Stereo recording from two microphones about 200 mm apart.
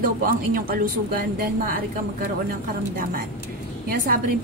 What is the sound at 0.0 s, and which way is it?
Speech, 45° right (ahead or behind).